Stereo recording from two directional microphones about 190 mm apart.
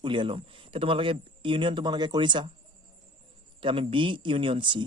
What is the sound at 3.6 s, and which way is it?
A man's voice, 25° right (ahead or behind).